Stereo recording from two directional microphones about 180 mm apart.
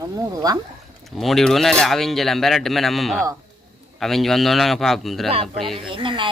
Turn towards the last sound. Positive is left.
turn(degrees=-25)  # may be behind; listen again after turning